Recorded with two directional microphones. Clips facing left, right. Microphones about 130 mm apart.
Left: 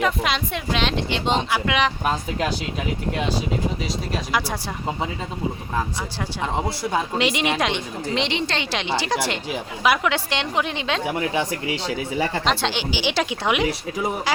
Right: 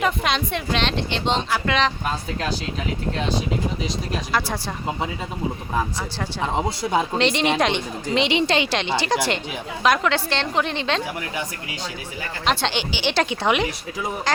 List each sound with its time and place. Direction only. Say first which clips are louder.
0.0 s speech: even; centre (ahead or behind)
4.3 s speech: right 1 dB; 10° left (ahead or behind)
7.2 s a woman's voice: right 1 dB; 5° left (ahead or behind)
8.3 s a woman's voice: right 5 dB; 15° right (ahead or behind)
8.7 s a woman's voice: right 1 dB; 5° left (ahead or behind)
11.0 s speech: left 5 dB; 25° left (ahead or behind)
12.5 s a woman's voice: even; centre (ahead or behind)